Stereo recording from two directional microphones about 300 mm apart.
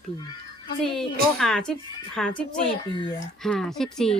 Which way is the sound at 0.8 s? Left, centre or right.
Centre.